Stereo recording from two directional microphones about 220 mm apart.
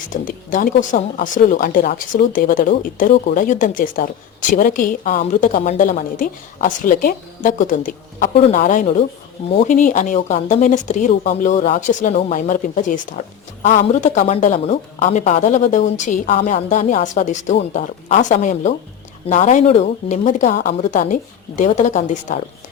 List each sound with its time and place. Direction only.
0.1 s speech: 35° left (ahead or behind)